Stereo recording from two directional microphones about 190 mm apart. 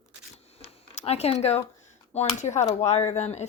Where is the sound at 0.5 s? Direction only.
30° left (ahead or behind).